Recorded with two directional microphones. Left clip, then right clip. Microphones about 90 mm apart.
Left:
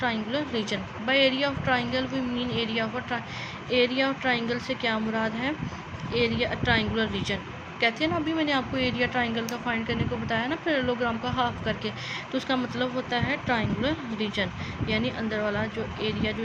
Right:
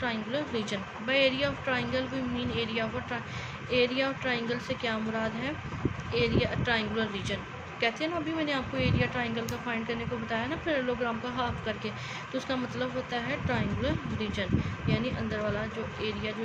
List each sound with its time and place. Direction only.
0.0 s speech: 35° left (ahead or behind)